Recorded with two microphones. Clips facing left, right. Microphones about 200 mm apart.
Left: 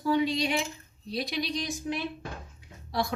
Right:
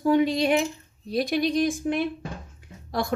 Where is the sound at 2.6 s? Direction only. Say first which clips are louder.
Right 2 dB; 50° right (ahead or behind).